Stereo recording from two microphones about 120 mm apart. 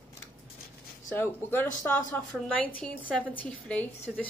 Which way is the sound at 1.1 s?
15° left (ahead or behind).